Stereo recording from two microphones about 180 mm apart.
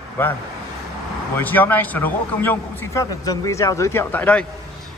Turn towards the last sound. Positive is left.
turn(degrees=5)  # may be behind; listen again after turning